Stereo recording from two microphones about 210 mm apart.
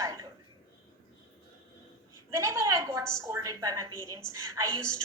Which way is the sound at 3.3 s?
15° right (ahead or behind).